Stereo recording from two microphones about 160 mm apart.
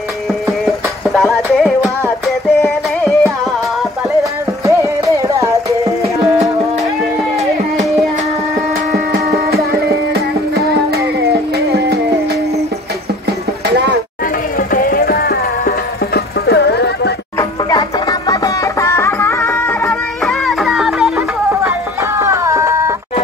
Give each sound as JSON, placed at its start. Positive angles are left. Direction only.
{"t": 1.1, "sound": "music", "side_deg": 0}
{"t": 4.2, "sound": "music", "side_deg": -20}
{"t": 14.6, "sound": "music", "side_deg": 60}
{"t": 17.4, "sound": "music", "side_deg": 25}
{"t": 19.9, "sound": "music", "side_deg": 0}
{"t": 21.6, "sound": "a sound", "side_deg": -15}